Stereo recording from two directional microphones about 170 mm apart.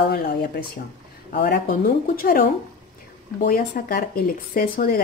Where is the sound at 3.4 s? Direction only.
55° left (ahead or behind).